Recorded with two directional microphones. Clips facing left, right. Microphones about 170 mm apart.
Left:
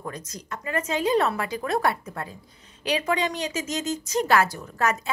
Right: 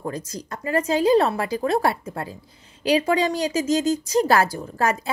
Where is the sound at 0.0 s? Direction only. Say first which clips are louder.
Right 6 dB; 30° right (ahead or behind).